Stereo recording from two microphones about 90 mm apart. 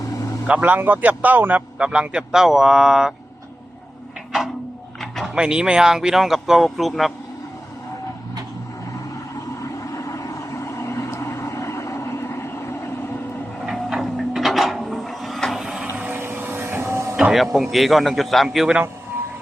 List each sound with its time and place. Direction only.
0.4 s a man's voice: 15° right (ahead or behind)
4.9 s a sound: 5° left (ahead or behind)
5.3 s speech: 10° right (ahead or behind)
9.3 s vehicle: 35° left (ahead or behind)
13.7 s a sound: centre (ahead or behind)
15.9 s vehicle: 20° right (ahead or behind)
17.2 s speech: 5° right (ahead or behind)